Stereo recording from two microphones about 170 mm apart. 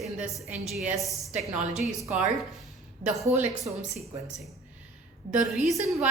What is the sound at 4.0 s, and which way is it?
Speech, 20° right (ahead or behind).